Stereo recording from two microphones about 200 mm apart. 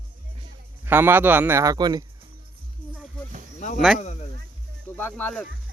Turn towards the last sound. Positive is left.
turn(degrees=10)  # may be behind; listen again after turning